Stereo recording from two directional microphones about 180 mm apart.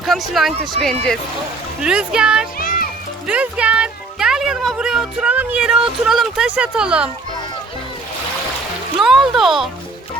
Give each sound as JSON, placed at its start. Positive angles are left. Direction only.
{"t": 0.0, "sound": "speech", "side_deg": 0}
{"t": 2.6, "sound": "music", "side_deg": 50}
{"t": 3.2, "sound": "speech", "side_deg": -5}
{"t": 9.0, "sound": "speech", "side_deg": 0}